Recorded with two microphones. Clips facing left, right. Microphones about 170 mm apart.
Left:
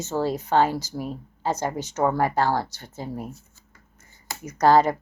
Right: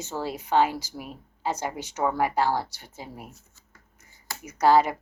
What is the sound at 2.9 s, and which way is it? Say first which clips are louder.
Speech: left 9 dB; 45° left (ahead or behind).